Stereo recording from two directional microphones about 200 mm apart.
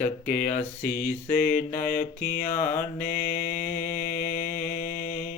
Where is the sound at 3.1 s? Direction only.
40° left (ahead or behind).